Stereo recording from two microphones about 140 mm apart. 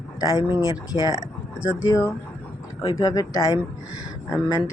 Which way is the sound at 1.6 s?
10° right (ahead or behind).